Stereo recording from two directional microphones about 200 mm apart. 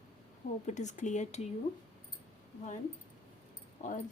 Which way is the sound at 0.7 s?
35° left (ahead or behind).